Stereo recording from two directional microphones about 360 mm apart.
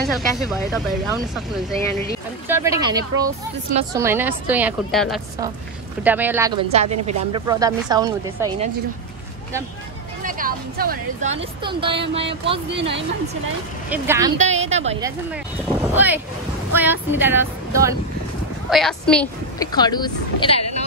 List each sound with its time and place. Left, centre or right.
0.0 s speech: centre
10.2 s a woman's voice: right
13.8 s speech: centre
14.6 s a woman's voice: centre